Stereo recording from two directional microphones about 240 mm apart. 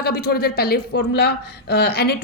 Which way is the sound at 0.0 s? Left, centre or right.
Left.